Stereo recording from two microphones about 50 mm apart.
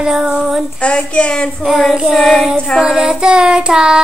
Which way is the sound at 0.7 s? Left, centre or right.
Left.